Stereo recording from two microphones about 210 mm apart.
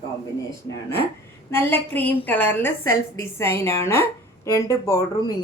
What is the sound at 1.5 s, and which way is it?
A woman's voice, 10° left (ahead or behind).